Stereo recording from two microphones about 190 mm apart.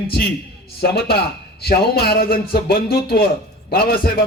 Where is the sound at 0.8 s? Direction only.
55° left (ahead or behind).